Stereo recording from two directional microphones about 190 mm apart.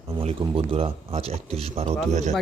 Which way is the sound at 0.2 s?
30° right (ahead or behind).